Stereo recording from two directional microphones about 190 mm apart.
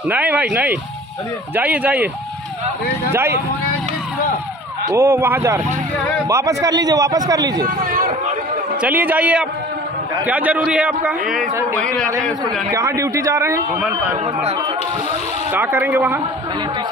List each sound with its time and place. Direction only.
0.1 s a man's voice: 10° right (ahead or behind)
3.1 s a man's voice: 10° right (ahead or behind)
4.8 s a man's voice: 15° right (ahead or behind)
7.8 s vehicle: 50° right (ahead or behind)
8.8 s a man's voice: 10° right (ahead or behind)
12.7 s a man's voice: 15° right (ahead or behind)
13.7 s speech: 5° right (ahead or behind)
15.5 s a man's voice: 10° right (ahead or behind)